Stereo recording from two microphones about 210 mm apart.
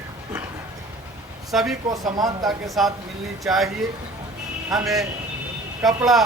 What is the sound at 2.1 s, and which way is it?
Speech, 20° right (ahead or behind).